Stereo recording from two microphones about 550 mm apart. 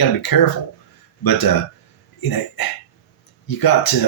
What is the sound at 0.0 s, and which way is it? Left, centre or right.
Speech, left.